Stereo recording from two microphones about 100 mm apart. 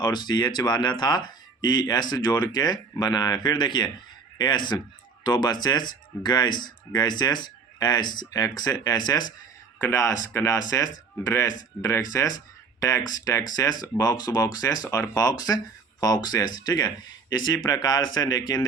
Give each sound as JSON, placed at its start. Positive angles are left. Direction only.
{"t": 0.0, "sound": "speech", "side_deg": 45}
{"t": 9.9, "sound": "speech", "side_deg": 30}